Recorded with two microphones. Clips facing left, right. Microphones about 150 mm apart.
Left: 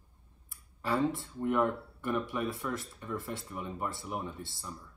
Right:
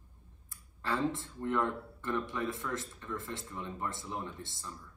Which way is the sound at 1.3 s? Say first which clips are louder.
Left 5 dB; 10° left (ahead or behind).